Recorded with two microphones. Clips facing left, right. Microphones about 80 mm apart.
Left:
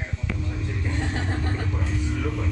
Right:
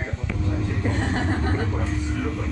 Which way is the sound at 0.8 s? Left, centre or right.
Right.